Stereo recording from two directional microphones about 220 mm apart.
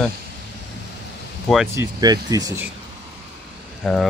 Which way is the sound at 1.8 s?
15° right (ahead or behind).